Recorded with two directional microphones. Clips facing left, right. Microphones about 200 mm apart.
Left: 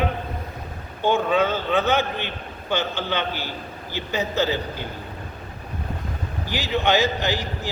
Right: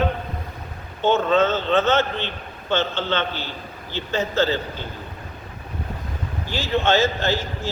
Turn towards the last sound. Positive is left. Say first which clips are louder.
# right 2 dB
turn(degrees=15)  # may be behind; listen again after turning